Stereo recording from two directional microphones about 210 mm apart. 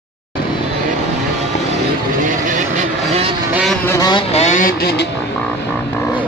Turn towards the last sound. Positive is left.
turn(degrees=50)  # may be behind; listen again after turning